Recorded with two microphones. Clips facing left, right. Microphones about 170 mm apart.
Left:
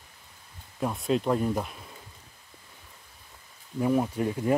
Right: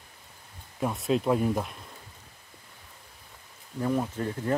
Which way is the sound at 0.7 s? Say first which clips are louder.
Even; centre (ahead or behind).